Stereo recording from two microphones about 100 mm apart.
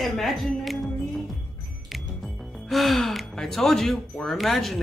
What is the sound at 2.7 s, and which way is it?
Speech, centre (ahead or behind).